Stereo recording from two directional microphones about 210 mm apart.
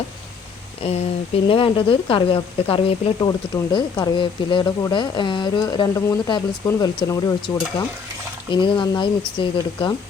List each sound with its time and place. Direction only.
0.8 s speech: 30° left (ahead or behind)